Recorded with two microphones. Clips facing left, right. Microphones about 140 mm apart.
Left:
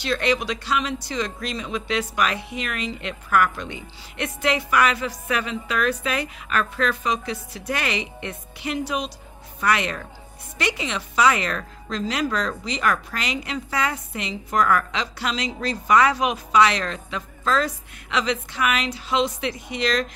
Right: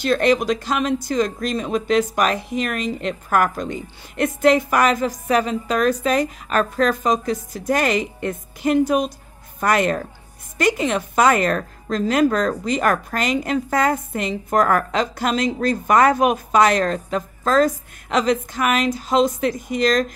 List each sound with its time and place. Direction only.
0.0 s a woman's voice: 45° right (ahead or behind)